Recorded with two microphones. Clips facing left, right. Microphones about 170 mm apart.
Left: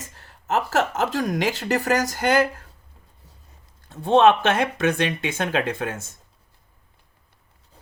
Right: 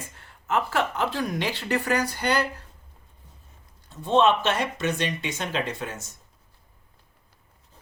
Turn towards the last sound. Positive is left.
turn(degrees=50)  # may be behind; listen again after turning